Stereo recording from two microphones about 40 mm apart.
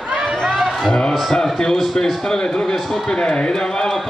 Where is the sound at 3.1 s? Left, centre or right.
Centre.